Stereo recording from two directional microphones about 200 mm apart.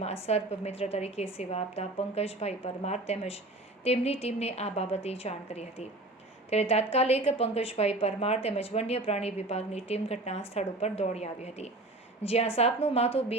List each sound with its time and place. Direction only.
0.3 s a woman's voice: 30° left (ahead or behind)